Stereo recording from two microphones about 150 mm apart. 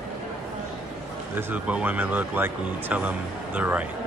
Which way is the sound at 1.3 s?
10° right (ahead or behind).